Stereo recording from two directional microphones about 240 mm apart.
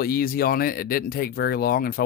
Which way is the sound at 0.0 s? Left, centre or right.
Left.